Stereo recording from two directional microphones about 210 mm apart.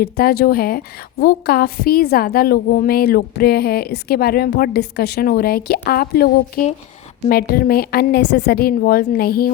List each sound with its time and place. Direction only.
0.0 s a woman's voice: 50° left (ahead or behind)